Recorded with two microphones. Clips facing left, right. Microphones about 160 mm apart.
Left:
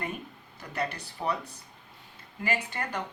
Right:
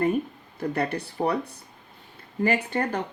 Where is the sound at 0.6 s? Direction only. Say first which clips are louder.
Right 7 dB; 55° right (ahead or behind).